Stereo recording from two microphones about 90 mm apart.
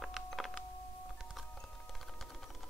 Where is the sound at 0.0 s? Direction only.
Centre (ahead or behind).